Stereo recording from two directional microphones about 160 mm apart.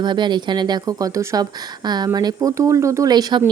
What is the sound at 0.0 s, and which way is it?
A woman's voice, 30° right (ahead or behind).